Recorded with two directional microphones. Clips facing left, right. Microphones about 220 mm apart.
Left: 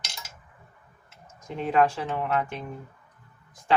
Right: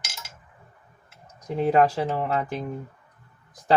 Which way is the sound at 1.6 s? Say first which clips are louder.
Right 3 dB; 35° right (ahead or behind).